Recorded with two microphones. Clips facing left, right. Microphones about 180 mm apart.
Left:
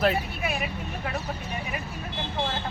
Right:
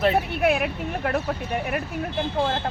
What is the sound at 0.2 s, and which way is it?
Speech, 70° right (ahead or behind).